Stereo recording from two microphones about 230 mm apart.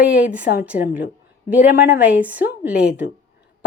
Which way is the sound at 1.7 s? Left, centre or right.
Left.